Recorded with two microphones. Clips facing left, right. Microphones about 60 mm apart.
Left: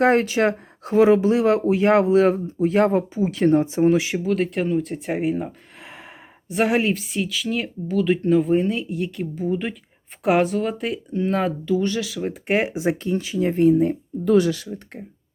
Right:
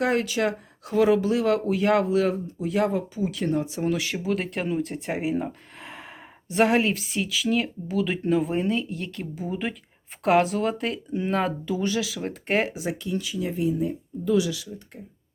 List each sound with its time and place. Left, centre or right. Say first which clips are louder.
0.0 s speech: left 6 dB; left
4.2 s speech: left 5 dB; centre
12.7 s speech: left 6 dB; left